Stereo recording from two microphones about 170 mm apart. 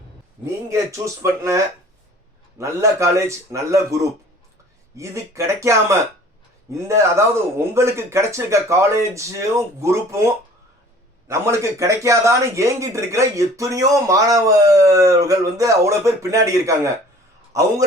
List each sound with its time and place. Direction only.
0.7 s a man's voice: 20° right (ahead or behind)